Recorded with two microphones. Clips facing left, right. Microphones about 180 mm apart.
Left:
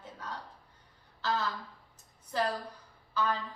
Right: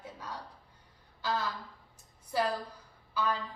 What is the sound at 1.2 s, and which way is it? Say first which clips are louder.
A woman's voice: left 1 dB; 10° right (ahead or behind).